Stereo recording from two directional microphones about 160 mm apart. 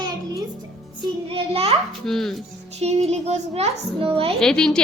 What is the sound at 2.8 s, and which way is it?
A child's voice, 40° right (ahead or behind).